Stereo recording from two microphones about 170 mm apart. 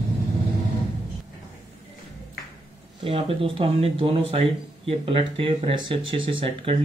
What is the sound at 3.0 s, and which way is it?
Speech, 35° right (ahead or behind).